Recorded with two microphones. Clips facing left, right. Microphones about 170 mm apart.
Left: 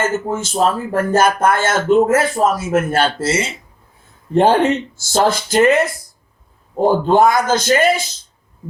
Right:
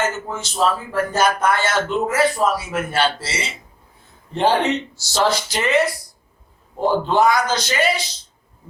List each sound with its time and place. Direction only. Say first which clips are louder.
0.0 s speech: left 5 dB; 50° left (ahead or behind)